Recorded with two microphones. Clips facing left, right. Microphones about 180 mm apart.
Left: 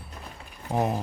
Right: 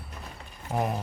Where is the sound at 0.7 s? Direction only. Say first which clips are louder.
Left 3 dB; 15° left (ahead or behind).